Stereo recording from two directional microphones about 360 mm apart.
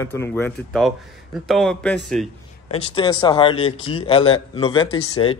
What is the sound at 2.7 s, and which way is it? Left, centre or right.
Speech, centre.